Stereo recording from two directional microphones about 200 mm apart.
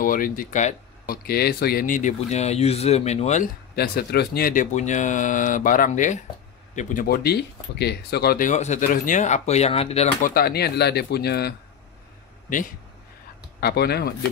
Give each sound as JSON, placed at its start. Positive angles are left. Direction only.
{"t": 0.0, "sound": "speech", "side_deg": 45}
{"t": 3.7, "sound": "speech", "side_deg": 50}
{"t": 10.3, "sound": "speech", "side_deg": 50}
{"t": 13.6, "sound": "speech", "side_deg": 55}